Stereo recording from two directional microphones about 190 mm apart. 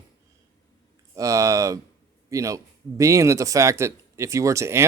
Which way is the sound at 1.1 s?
15° right (ahead or behind).